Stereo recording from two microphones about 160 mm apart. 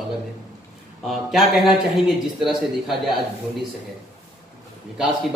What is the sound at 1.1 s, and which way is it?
A man's voice, centre (ahead or behind).